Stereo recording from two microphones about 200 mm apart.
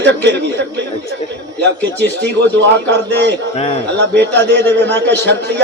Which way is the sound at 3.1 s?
60° right (ahead or behind).